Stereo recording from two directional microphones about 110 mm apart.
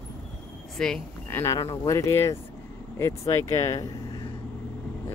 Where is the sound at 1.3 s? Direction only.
30° left (ahead or behind).